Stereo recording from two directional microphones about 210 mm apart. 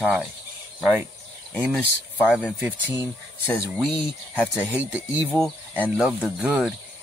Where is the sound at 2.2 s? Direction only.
5° right (ahead or behind).